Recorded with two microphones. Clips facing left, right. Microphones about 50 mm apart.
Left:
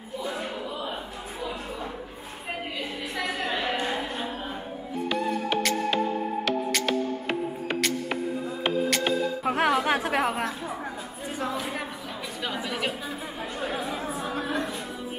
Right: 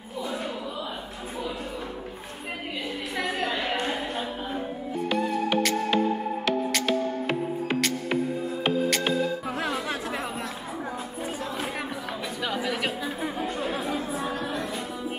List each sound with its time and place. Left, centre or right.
5.1 s music: centre
8.6 s music: centre
9.4 s music: left
12.4 s a sound: centre